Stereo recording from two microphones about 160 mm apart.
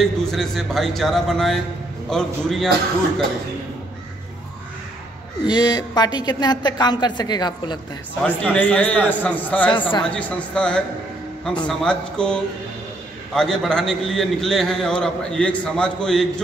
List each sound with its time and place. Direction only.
0.0 s a man's voice: centre (ahead or behind)
5.5 s a woman's voice: 25° left (ahead or behind)
8.2 s a man's voice: 10° left (ahead or behind)